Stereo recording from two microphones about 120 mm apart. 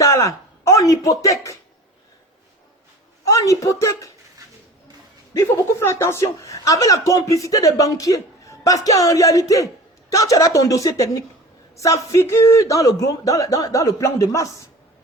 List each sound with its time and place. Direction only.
0.0 s speech: 25° left (ahead or behind)
3.2 s speech: 30° left (ahead or behind)
5.3 s speech: 25° left (ahead or behind)